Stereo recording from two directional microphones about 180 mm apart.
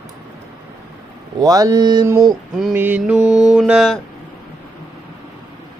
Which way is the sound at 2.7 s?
10° right (ahead or behind).